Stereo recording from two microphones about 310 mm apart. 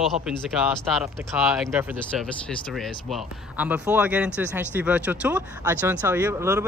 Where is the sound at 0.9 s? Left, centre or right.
Centre.